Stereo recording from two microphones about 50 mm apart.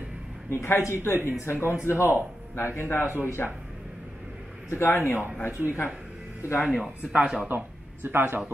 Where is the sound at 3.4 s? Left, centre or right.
Left.